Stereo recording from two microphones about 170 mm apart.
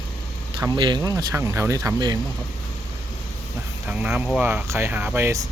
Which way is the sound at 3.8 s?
10° right (ahead or behind).